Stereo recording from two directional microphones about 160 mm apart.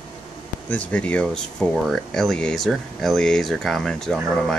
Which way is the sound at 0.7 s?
10° left (ahead or behind).